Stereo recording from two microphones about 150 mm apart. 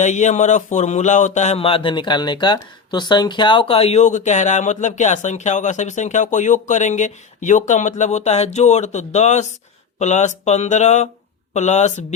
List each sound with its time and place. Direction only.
0.0 s speech: 50° left (ahead or behind)